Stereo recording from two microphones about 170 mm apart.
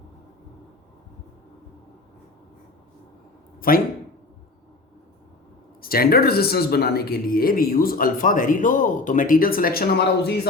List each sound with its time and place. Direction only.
3.7 s speech: 55° left (ahead or behind)
5.8 s speech: 60° left (ahead or behind)